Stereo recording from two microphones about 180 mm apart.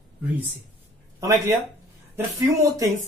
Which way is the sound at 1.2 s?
15° right (ahead or behind).